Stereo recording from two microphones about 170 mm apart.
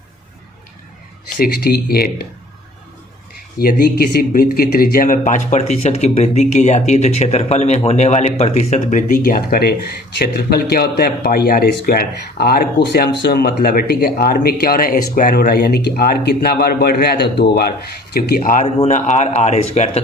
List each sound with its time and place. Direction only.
1.4 s speech: 65° left (ahead or behind)
3.6 s speech: 65° left (ahead or behind); by 17.7 s 80° left
18.1 s speech: 60° left (ahead or behind); by 20.0 s 40° left (ahead or behind)